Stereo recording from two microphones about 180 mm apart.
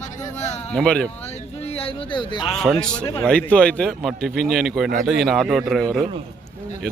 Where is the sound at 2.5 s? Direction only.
Centre (ahead or behind).